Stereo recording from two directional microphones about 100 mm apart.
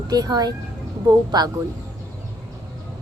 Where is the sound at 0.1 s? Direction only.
40° right (ahead or behind).